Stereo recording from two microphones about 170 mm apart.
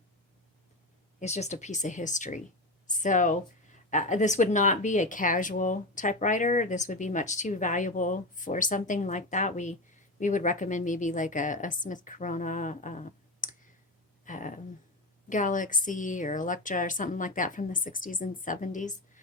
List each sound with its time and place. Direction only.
1.2 s speech: 40° left (ahead or behind)
14.3 s a sound: 50° left (ahead or behind)
15.3 s speech: 50° left (ahead or behind)